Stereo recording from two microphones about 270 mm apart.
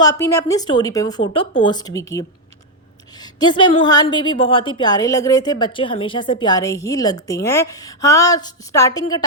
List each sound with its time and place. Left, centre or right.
0.0 s a woman's voice: centre
3.4 s a woman's voice: centre